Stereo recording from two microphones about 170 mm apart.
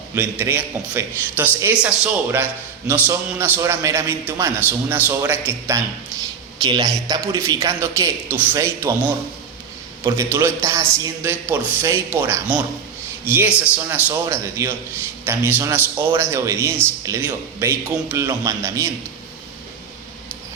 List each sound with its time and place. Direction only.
0.1 s a man's voice: 15° right (ahead or behind)